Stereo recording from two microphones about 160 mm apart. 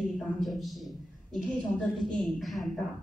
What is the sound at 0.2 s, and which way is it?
A man's voice, centre (ahead or behind).